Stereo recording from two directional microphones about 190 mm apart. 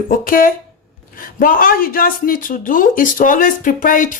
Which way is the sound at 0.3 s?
50° left (ahead or behind).